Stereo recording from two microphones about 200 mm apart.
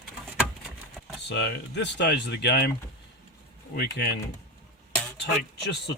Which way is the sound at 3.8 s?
55° left (ahead or behind).